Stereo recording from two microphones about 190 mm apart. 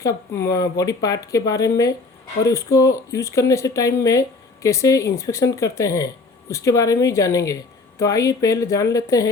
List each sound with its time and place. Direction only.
0.0 s a woman's voice: 15° left (ahead or behind)